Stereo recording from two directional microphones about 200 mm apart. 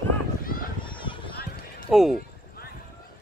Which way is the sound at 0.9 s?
25° left (ahead or behind).